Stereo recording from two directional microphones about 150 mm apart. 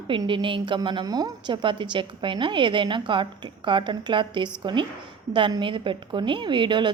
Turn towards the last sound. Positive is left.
turn(degrees=-30)  # may be behind; listen again after turning